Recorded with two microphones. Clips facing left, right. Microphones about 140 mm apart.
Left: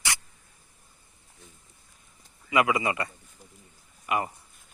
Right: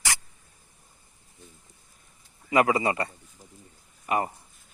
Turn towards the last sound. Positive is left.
turn(degrees=-35)  # may be behind; listen again after turning